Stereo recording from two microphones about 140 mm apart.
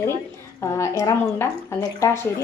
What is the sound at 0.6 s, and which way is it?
Speech, 20° left (ahead or behind).